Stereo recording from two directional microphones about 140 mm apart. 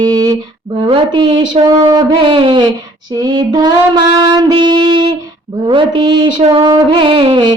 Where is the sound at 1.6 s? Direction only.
30° right (ahead or behind).